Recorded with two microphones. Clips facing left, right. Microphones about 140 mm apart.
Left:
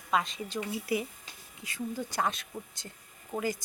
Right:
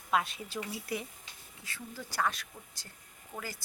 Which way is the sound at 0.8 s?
5° left (ahead or behind).